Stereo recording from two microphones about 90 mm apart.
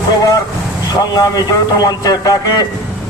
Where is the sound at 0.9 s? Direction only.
45° left (ahead or behind).